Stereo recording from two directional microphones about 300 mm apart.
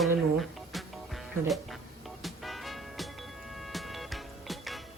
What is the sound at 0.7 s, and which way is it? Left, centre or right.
Music, centre.